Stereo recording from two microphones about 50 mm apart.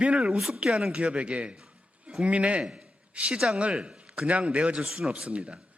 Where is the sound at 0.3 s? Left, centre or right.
Centre.